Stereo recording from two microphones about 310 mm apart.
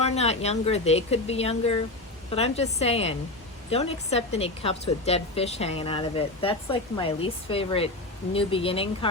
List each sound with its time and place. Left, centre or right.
0.0 s a woman's voice: left